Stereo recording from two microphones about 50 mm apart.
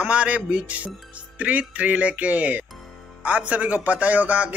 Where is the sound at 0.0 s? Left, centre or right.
Right.